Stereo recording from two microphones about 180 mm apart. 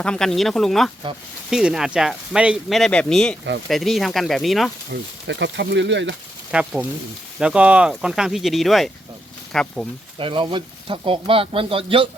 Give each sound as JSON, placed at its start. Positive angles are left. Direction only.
{"t": 0.0, "sound": "speech", "side_deg": 5}
{"t": 4.9, "sound": "speech", "side_deg": -75}
{"t": 6.5, "sound": "speech", "side_deg": -5}
{"t": 10.2, "sound": "speech", "side_deg": -30}